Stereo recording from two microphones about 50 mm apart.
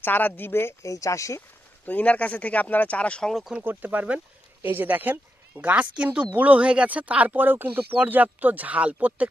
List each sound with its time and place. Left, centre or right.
0.0 s speech: left
0.5 s speech: left
0.8 s speech: left
1.9 s speech: left
3.6 s a woman's voice: right